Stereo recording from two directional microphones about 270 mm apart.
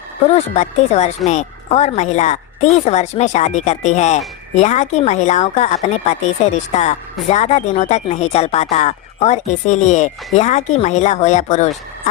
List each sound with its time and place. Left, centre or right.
0.5 s speech: left